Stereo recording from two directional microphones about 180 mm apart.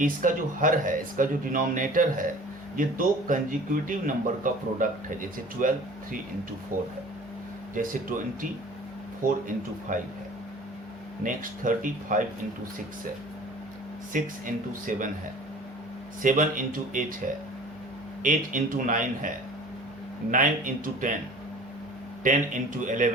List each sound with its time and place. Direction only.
0.0 s a man's voice: 45° right (ahead or behind)
11.2 s a man's voice: 50° right (ahead or behind)
14.1 s a man's voice: 45° right (ahead or behind)
16.2 s a man's voice: 45° right (ahead or behind)
20.3 s a man's voice: 45° right (ahead or behind)
22.2 s a man's voice: 45° right (ahead or behind)